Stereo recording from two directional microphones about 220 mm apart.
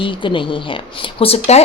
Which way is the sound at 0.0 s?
20° left (ahead or behind).